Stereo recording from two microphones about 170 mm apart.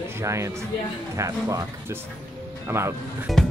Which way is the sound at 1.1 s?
20° right (ahead or behind).